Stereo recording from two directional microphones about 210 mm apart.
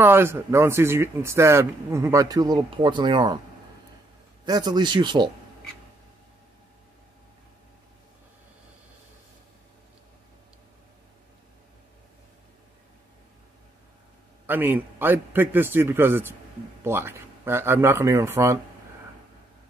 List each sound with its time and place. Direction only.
0.0 s a man's voice: 10° right (ahead or behind)
4.5 s speech: 20° right (ahead or behind)
14.4 s a man's voice: 10° right (ahead or behind)